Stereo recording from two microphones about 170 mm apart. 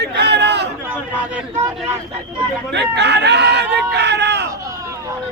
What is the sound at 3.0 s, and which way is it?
Speech, 85° right.